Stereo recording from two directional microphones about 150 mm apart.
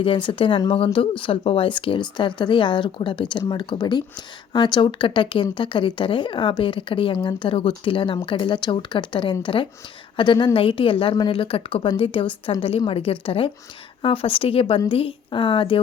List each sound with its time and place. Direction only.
0.0 s speech: 35° left (ahead or behind)